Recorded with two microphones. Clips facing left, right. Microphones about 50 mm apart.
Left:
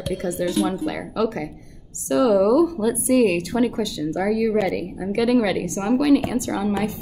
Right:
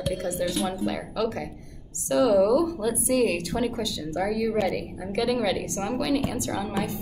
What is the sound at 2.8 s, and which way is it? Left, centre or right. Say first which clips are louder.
A woman's voice: left 5 dB; left.